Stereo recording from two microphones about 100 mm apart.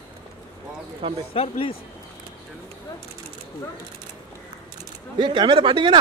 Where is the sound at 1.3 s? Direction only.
70° left (ahead or behind).